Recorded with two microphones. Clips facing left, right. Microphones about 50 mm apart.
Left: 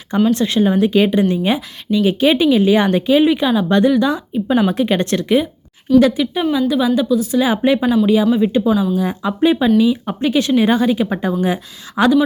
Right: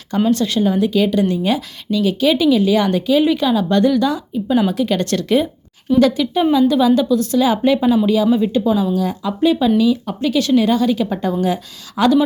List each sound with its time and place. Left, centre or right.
0.3 s speech: left
4.7 s speech: left